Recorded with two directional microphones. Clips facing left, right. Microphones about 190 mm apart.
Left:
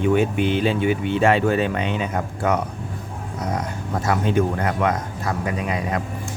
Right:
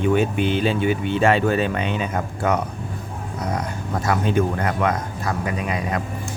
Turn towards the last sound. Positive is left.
turn(degrees=25)  # may be behind; listen again after turning